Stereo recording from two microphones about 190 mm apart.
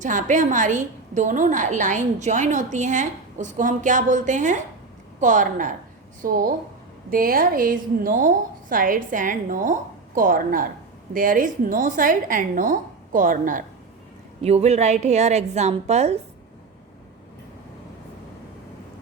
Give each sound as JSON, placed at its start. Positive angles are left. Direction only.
{"t": 0.0, "sound": "a woman's voice", "side_deg": -40}